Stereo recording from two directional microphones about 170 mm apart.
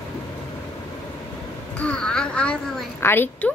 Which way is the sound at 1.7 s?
5° left (ahead or behind).